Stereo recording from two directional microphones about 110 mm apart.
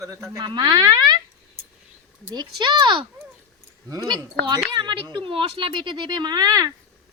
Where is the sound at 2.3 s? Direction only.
40° right (ahead or behind).